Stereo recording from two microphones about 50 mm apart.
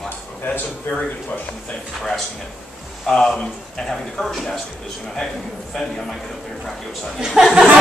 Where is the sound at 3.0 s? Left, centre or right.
Centre.